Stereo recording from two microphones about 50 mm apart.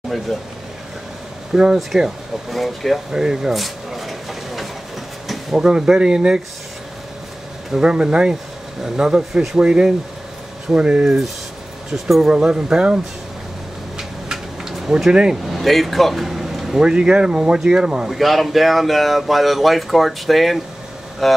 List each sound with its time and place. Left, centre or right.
0.1 s speech: centre
1.5 s speech: centre
2.5 s speech: centre
3.1 s a sound: centre
5.6 s speech: centre
7.7 s speech: centre
12.3 s speech: centre
13.9 s a sound: centre
14.9 s speech: centre
15.5 s speech: centre
16.8 s speech: centre
18.0 s speech: centre